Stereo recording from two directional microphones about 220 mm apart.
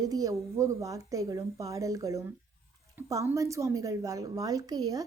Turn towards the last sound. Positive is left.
turn(degrees=-15)  # may be behind; listen again after turning